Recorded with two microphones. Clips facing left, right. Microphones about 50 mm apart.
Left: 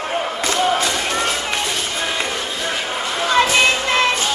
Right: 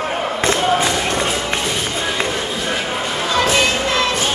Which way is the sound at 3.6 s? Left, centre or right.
Left.